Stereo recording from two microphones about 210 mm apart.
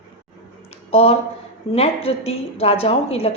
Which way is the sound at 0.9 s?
30° left (ahead or behind).